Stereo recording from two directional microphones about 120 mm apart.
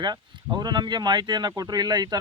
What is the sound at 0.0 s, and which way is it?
Speech, 35° right (ahead or behind).